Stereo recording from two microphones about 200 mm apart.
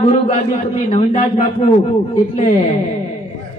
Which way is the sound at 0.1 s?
30° left (ahead or behind).